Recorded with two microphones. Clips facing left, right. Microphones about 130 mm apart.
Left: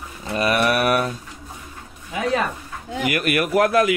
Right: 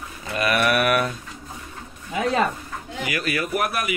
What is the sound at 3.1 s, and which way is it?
Speech, 55° left (ahead or behind).